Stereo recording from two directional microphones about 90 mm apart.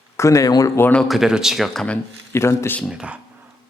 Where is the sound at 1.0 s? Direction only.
5° right (ahead or behind).